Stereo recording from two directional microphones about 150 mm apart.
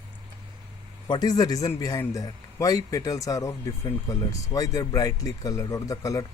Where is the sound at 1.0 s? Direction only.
30° left (ahead or behind).